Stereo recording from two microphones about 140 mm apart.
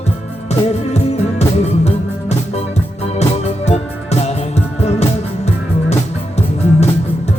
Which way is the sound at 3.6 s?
50° left (ahead or behind).